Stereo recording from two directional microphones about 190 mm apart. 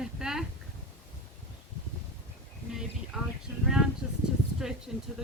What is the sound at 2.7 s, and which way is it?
A woman's voice, centre (ahead or behind).